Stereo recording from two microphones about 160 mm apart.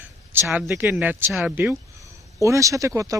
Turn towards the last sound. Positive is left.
turn(degrees=-20)  # may be behind; listen again after turning